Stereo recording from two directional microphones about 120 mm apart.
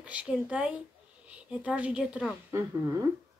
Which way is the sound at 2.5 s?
25° right (ahead or behind).